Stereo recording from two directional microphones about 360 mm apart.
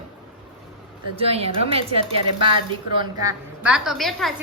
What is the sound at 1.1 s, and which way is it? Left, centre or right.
A woman's voice, centre.